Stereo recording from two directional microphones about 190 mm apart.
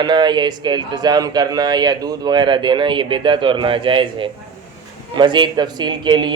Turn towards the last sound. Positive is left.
turn(degrees=-25)  # may be behind; listen again after turning